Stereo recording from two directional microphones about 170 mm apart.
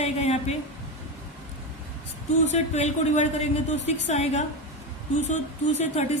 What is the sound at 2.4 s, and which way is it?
Speech, 40° left (ahead or behind).